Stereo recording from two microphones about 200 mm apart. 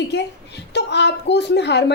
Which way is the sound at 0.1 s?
60° left (ahead or behind).